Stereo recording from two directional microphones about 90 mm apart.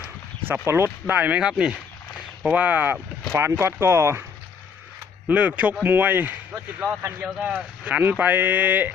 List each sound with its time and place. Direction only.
0.4 s speech: 25° right (ahead or behind)
5.3 s speech: 15° right (ahead or behind)